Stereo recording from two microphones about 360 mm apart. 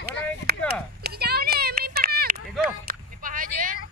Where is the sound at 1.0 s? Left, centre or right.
Right.